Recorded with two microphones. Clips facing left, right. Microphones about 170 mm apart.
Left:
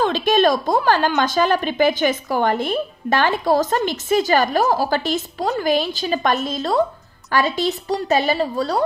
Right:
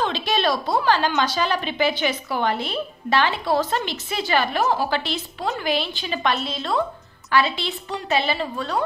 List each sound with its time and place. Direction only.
0.0 s a woman's voice: 45° left (ahead or behind)